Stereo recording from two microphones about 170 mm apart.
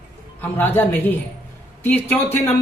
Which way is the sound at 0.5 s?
10° left (ahead or behind).